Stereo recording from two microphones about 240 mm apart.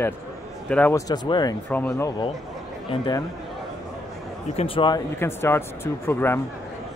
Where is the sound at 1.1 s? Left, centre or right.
Centre.